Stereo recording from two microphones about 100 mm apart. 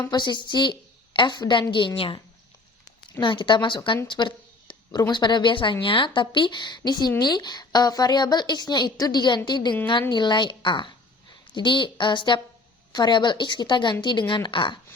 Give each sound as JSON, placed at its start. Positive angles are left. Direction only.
{"t": 0.1, "sound": "a woman's voice", "side_deg": 45}
{"t": 3.2, "sound": "a woman's voice", "side_deg": 55}